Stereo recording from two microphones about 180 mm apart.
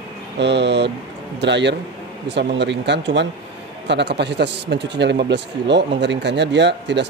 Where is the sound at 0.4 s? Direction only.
75° right (ahead or behind).